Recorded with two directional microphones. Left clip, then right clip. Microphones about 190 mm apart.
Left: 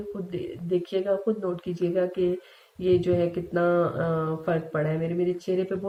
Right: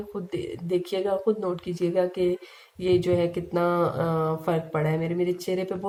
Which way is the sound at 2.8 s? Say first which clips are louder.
Even; 40° right (ahead or behind).